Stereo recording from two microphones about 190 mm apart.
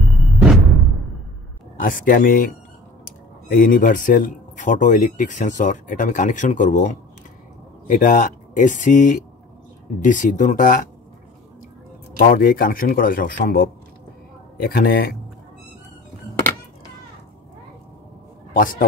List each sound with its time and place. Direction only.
1.8 s speech: 45° left (ahead or behind)
12.2 s speech: 50° left (ahead or behind)
18.5 s a man's voice: 45° left (ahead or behind)